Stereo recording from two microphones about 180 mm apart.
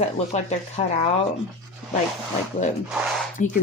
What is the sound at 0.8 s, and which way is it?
Speech, 35° left (ahead or behind).